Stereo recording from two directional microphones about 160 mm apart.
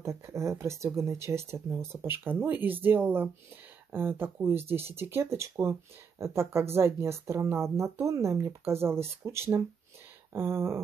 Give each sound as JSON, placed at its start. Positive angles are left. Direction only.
{"t": 0.0, "sound": "speech", "side_deg": -20}